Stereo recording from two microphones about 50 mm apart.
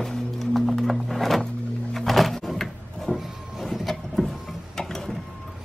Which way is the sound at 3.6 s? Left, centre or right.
Centre.